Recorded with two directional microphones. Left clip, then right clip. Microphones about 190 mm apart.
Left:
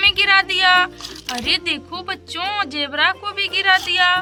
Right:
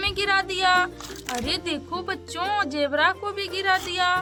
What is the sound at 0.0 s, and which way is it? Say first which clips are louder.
Music: left 9 dB; 40° right (ahead or behind).